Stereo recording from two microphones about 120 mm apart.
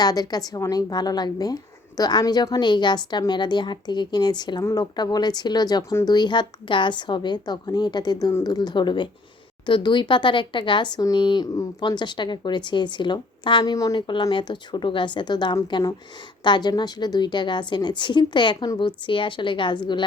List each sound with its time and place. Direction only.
0.0 s a woman's voice: 35° left (ahead or behind)
13.7 s speech: 30° left (ahead or behind)
14.1 s a woman's voice: 40° left (ahead or behind)